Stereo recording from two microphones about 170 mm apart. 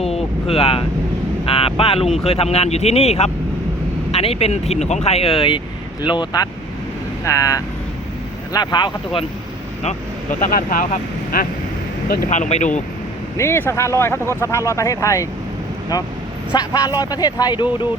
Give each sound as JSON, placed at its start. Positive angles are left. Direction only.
{"t": 0.0, "sound": "vehicle", "side_deg": 35}
{"t": 1.5, "sound": "speech", "side_deg": 35}
{"t": 10.4, "sound": "speech", "side_deg": 55}
{"t": 13.3, "sound": "speech", "side_deg": 15}
{"t": 16.6, "sound": "speech", "side_deg": 20}